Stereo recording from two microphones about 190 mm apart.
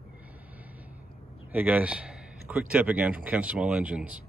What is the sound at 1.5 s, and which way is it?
Speech, 10° right (ahead or behind).